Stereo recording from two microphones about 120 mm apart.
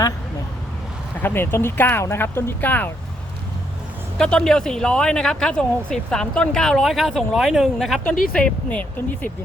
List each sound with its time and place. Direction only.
1.2 s speech: 20° left (ahead or behind)
4.2 s speech: 5° left (ahead or behind)